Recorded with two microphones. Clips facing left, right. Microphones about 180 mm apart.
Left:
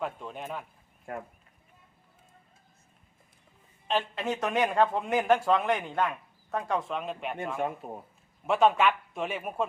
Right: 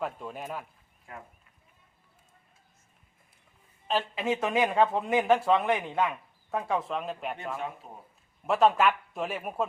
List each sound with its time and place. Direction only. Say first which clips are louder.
0.0 s speech: even; 5° right (ahead or behind)
1.1 s a man's voice: left 8 dB; 50° left (ahead or behind)
3.8 s speech: right 1 dB; 5° right (ahead or behind)
7.8 s a man's voice: left 8 dB; 50° left (ahead or behind)
8.4 s speech: even; centre (ahead or behind)